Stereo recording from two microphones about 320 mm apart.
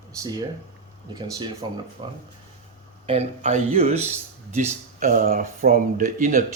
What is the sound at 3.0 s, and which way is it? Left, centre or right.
Speech, centre.